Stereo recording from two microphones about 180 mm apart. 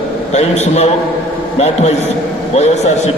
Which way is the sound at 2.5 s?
40° left (ahead or behind).